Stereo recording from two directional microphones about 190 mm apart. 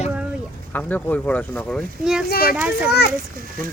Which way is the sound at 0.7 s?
10° left (ahead or behind).